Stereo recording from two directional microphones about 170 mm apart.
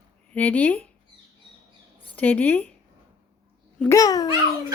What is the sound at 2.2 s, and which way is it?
Speech, 10° left (ahead or behind).